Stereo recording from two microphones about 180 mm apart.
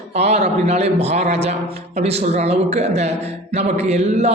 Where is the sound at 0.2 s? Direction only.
35° right (ahead or behind).